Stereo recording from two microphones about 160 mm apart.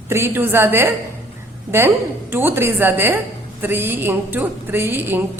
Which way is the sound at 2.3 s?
15° right (ahead or behind).